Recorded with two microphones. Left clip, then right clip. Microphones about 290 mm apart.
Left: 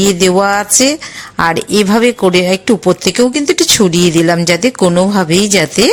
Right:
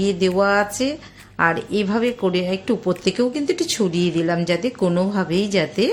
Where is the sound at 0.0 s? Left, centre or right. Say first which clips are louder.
Left 8 dB; left.